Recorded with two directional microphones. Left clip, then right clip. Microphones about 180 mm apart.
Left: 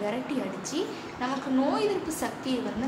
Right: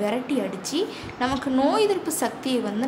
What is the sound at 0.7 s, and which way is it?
A woman's voice, 65° right (ahead or behind).